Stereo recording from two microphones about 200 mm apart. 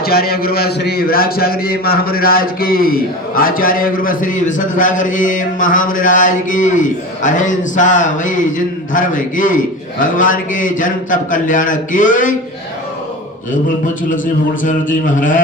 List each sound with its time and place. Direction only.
0.0 s a man's voice: 50° left (ahead or behind)
14.6 s a man's voice: 40° left (ahead or behind)